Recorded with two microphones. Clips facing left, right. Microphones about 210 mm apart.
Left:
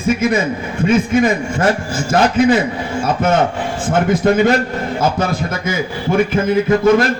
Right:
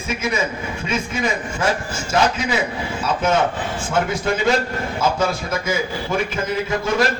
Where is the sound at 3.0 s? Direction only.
55° left (ahead or behind).